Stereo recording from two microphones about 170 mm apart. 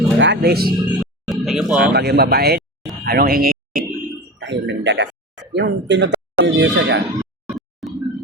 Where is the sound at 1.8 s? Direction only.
65° right (ahead or behind).